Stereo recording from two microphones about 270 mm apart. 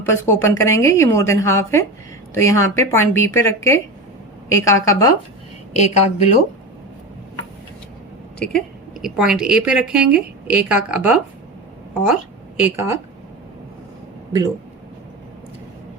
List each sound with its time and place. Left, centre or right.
0.0 s a woman's voice: centre
5.7 s a woman's voice: left
8.4 s a woman's voice: centre